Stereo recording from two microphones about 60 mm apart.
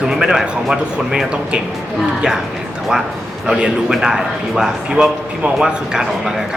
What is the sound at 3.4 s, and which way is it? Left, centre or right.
A man's voice, centre.